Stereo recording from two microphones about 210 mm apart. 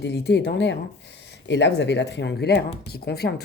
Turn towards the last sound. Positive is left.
turn(degrees=50)  # may be behind; listen again after turning